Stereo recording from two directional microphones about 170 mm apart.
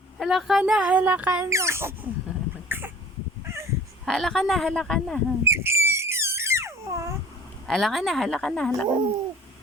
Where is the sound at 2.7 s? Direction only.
10° right (ahead or behind).